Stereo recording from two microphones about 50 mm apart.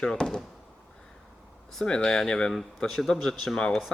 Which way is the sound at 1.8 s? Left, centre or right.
Centre.